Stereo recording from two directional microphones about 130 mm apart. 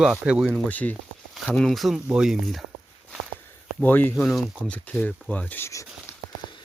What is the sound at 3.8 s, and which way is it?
Speech, 15° left (ahead or behind).